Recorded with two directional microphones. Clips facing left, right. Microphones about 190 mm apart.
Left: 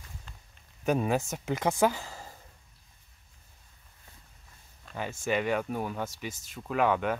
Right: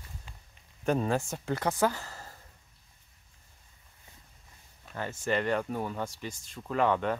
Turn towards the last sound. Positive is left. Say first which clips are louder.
# even
turn(degrees=5)  # may be behind; listen again after turning